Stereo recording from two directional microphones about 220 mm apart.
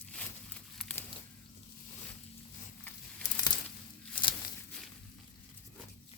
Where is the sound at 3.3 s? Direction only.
20° left (ahead or behind).